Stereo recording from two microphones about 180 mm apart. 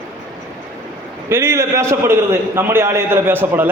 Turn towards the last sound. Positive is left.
turn(degrees=-10)  # may be behind; listen again after turning